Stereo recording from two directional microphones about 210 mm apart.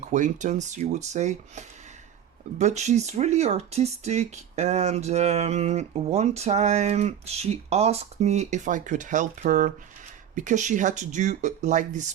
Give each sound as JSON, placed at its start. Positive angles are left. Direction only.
{"t": 0.0, "sound": "speech", "side_deg": -35}